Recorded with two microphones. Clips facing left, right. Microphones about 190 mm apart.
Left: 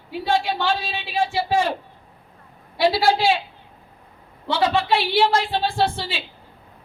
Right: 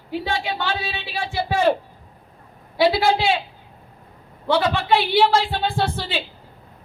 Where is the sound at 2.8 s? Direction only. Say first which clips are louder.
Right 1 dB; 55° right (ahead or behind).